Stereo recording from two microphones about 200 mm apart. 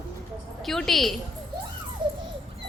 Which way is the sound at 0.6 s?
Centre (ahead or behind).